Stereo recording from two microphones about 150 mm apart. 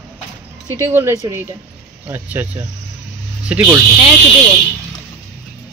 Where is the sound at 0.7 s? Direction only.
15° right (ahead or behind).